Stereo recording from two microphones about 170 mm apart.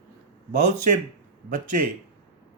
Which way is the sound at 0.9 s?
55° right (ahead or behind).